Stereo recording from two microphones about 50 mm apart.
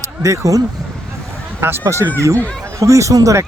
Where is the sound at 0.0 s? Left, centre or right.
Right.